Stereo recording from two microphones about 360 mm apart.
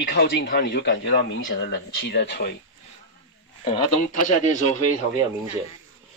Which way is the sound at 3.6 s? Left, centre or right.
Centre.